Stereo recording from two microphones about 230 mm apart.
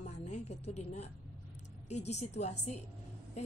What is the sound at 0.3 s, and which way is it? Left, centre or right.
A woman's voice, left.